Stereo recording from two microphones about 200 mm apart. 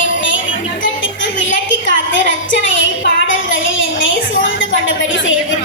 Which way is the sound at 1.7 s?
70° left (ahead or behind).